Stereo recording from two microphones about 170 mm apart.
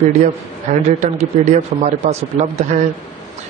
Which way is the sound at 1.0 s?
45° right (ahead or behind).